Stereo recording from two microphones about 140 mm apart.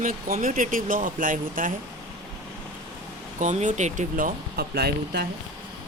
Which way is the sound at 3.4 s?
60° right (ahead or behind).